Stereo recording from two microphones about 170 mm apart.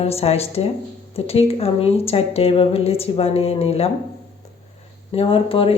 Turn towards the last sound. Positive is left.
turn(degrees=35)  # may be behind; listen again after turning